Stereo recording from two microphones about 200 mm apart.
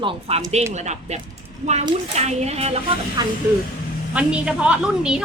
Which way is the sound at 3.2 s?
20° right (ahead or behind).